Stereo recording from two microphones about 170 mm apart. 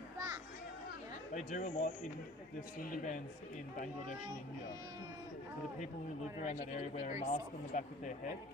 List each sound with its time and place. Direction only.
1.3 s speech: 45° left (ahead or behind)
2.9 s speech: 50° left (ahead or behind)
6.4 s speech: 40° left (ahead or behind)